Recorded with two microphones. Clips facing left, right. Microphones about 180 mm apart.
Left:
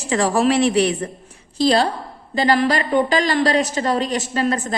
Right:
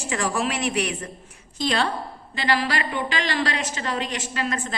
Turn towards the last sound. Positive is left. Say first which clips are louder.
# left 7 dB
turn(degrees=40)  # may be behind; listen again after turning